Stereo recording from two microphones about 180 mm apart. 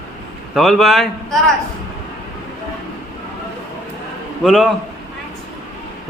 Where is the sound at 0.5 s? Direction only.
Centre (ahead or behind).